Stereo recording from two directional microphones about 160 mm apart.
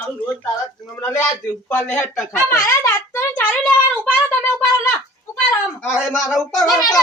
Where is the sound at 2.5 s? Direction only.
15° left (ahead or behind).